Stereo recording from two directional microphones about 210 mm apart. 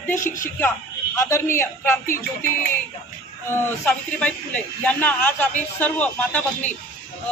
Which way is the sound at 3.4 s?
10° left (ahead or behind).